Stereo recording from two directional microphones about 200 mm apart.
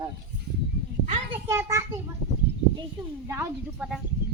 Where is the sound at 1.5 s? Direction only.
15° right (ahead or behind).